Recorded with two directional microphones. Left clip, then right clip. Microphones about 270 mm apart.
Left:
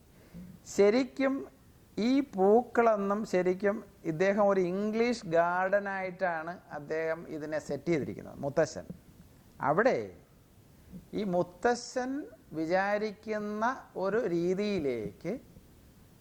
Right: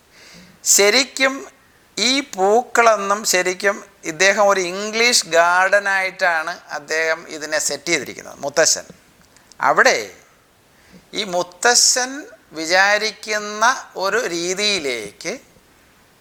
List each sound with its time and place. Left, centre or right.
0.6 s speech: centre
8.2 s speech: centre
8.4 s speech: centre